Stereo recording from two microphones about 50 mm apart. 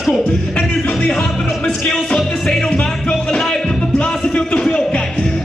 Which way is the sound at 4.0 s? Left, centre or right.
Centre.